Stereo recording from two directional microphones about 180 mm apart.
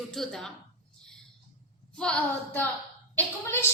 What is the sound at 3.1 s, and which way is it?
Speech, 10° left (ahead or behind).